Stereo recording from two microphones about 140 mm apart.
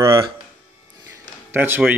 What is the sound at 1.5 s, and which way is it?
Speech, 15° right (ahead or behind).